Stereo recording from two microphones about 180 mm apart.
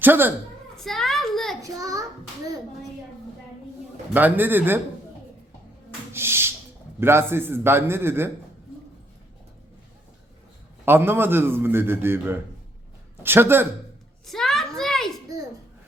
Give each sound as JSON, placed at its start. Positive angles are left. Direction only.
{"t": 0.0, "sound": "a man's voice", "side_deg": -10}
{"t": 0.8, "sound": "a sound", "side_deg": 0}
{"t": 1.6, "sound": "child singing", "side_deg": -20}
{"t": 4.1, "sound": "a man's voice", "side_deg": -10}
{"t": 6.1, "sound": "owl", "side_deg": -15}
{"t": 7.0, "sound": "a man's voice", "side_deg": -15}
{"t": 10.8, "sound": "a man's voice", "side_deg": -10}
{"t": 14.3, "sound": "a sound", "side_deg": 0}
{"t": 14.8, "sound": "children playing", "side_deg": 0}